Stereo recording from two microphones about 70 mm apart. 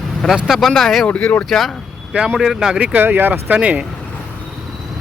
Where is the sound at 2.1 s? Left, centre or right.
Centre.